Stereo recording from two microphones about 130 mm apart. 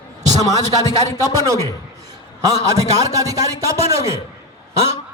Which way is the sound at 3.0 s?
25° right (ahead or behind).